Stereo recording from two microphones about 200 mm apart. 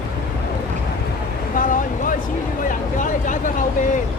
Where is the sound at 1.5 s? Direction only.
40° left (ahead or behind).